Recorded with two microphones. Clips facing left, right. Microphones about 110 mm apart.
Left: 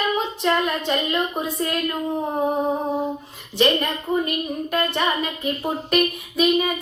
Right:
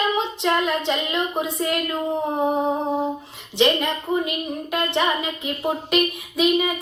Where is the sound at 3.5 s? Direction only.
20° right (ahead or behind).